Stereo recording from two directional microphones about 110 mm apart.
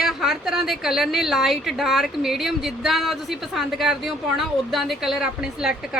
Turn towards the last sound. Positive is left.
turn(degrees=-5)  # may be behind; listen again after turning